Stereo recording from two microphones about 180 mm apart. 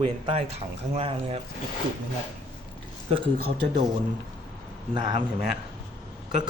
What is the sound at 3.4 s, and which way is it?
Speech, 35° right (ahead or behind).